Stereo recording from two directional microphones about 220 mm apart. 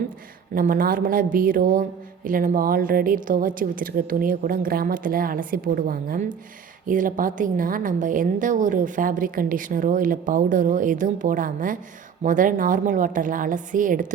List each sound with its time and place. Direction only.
0.5 s a woman's voice: 40° right (ahead or behind)